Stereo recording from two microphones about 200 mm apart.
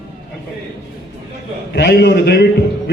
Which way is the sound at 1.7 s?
50° left (ahead or behind).